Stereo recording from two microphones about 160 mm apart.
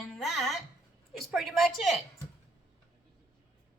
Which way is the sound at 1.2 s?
Centre (ahead or behind).